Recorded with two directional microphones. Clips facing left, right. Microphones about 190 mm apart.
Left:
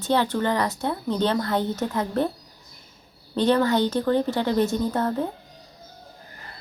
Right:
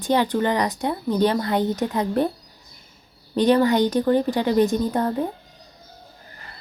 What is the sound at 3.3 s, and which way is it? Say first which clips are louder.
Speech: right 3 dB; 15° right (ahead or behind).